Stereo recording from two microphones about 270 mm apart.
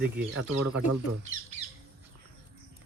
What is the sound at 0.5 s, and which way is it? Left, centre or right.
Speech, right.